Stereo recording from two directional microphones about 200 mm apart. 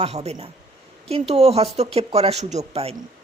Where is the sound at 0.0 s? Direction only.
30° right (ahead or behind).